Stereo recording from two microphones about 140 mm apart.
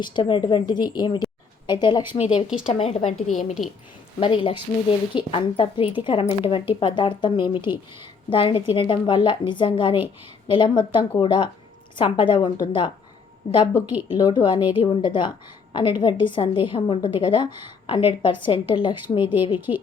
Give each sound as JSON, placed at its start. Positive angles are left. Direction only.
{"t": 0.0, "sound": "a woman's voice", "side_deg": 35}
{"t": 2.1, "sound": "speech", "side_deg": 50}
{"t": 3.1, "sound": "a woman's voice", "side_deg": 60}
{"t": 4.2, "sound": "speech", "side_deg": 40}
{"t": 13.5, "sound": "speech", "side_deg": 50}
{"t": 14.1, "sound": "speech", "side_deg": 35}